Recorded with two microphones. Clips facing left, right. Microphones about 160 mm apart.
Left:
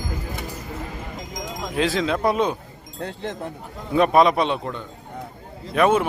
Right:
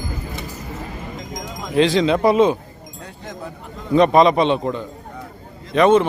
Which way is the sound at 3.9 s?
5° left (ahead or behind).